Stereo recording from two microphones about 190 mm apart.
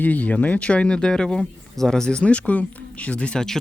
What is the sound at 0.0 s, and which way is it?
Speech, 10° left (ahead or behind).